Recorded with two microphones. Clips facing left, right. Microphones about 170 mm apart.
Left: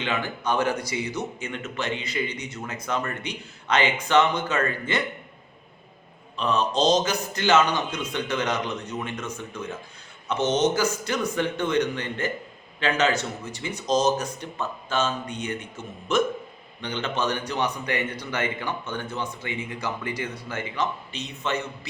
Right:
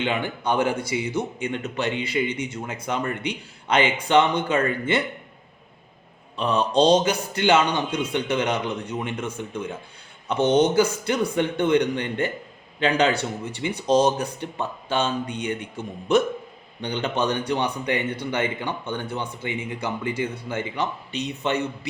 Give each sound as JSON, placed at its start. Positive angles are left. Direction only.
{"t": 0.0, "sound": "speech", "side_deg": -30}
{"t": 6.3, "sound": "speech", "side_deg": -30}